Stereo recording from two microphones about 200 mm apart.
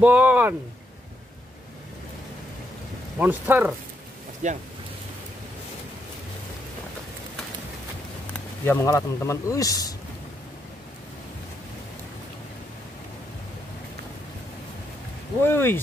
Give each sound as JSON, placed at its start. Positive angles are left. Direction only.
{"t": 0.0, "sound": "speech", "side_deg": -10}
{"t": 3.2, "sound": "speech", "side_deg": -10}
{"t": 4.4, "sound": "speech", "side_deg": -35}
{"t": 8.6, "sound": "speech", "side_deg": 15}
{"t": 15.4, "sound": "speech", "side_deg": 10}